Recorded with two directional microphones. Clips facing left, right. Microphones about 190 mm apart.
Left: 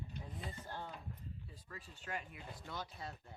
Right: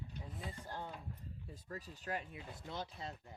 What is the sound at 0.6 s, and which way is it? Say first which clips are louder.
Speech: right 2 dB; 10° right (ahead or behind).